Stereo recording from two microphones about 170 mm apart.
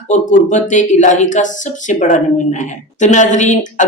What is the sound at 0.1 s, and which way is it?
Speech, 45° left (ahead or behind).